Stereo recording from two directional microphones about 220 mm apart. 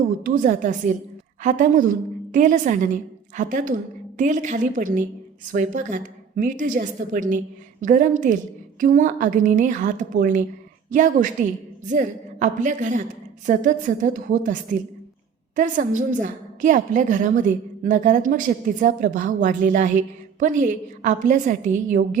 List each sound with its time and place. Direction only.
0.2 s a woman's voice: 40° right (ahead or behind)